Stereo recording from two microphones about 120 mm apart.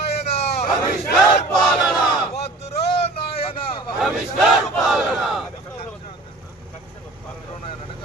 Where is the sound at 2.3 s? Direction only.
60° left (ahead or behind).